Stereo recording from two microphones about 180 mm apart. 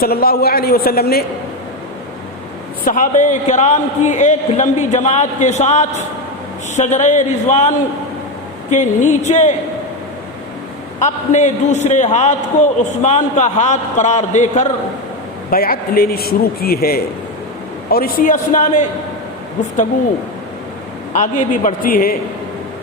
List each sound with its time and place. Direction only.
0.0 s a man's voice: 55° left (ahead or behind)
2.8 s a man's voice: 45° left (ahead or behind)
8.7 s a man's voice: 40° left (ahead or behind)
11.0 s a man's voice: 40° left (ahead or behind)
15.4 s a man's voice: 55° left (ahead or behind)
21.1 s a man's voice: 45° left (ahead or behind)